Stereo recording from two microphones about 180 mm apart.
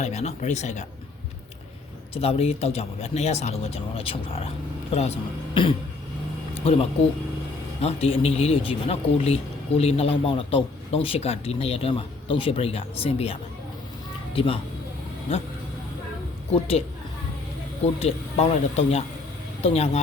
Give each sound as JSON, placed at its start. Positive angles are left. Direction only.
{"t": 0.0, "sound": "speech", "side_deg": 35}
{"t": 2.1, "sound": "speech", "side_deg": 35}
{"t": 6.5, "sound": "a sound", "side_deg": 30}
{"t": 7.8, "sound": "speech", "side_deg": 35}
{"t": 16.5, "sound": "speech", "side_deg": 35}
{"t": 18.0, "sound": "speech", "side_deg": 35}